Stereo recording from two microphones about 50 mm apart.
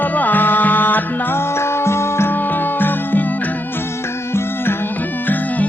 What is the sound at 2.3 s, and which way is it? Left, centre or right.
Music, left.